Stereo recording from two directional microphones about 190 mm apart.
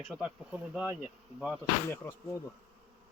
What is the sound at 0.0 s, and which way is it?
Speech, 5° right (ahead or behind).